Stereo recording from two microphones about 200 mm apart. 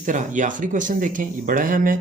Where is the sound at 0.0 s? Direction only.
40° right (ahead or behind).